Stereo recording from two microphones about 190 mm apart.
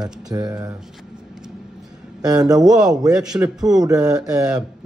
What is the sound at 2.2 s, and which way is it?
Speech, 20° right (ahead or behind).